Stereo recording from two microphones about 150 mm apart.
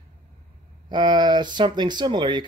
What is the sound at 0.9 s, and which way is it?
Speech, 30° right (ahead or behind).